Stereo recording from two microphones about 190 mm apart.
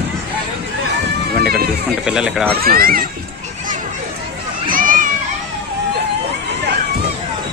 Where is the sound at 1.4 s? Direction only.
55° right (ahead or behind).